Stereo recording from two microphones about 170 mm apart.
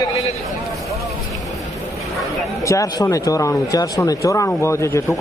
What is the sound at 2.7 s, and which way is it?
A man's voice, 20° left (ahead or behind).